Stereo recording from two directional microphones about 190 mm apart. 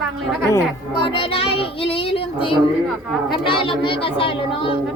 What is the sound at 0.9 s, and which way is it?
Speech, 25° left (ahead or behind).